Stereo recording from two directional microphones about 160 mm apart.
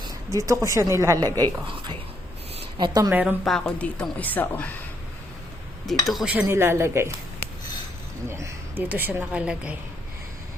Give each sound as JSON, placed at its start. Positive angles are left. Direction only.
{"t": 0.0, "sound": "a woman's voice", "side_deg": -20}
{"t": 2.6, "sound": "a sound", "side_deg": -30}
{"t": 3.1, "sound": "a woman's voice", "side_deg": -10}
{"t": 3.4, "sound": "speech", "side_deg": 5}
{"t": 5.9, "sound": "a woman's voice", "side_deg": 0}
{"t": 8.3, "sound": "a woman's voice", "side_deg": -15}